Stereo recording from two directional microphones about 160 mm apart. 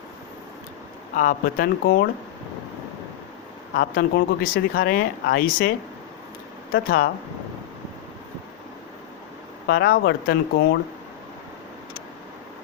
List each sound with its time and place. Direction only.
1.1 s speech: 55° left (ahead or behind); by 2.0 s 70° left (ahead or behind)
3.8 s speech: 70° left (ahead or behind)
6.7 s speech: 65° left (ahead or behind)
9.6 s speech: 75° left (ahead or behind); by 10.8 s 90° left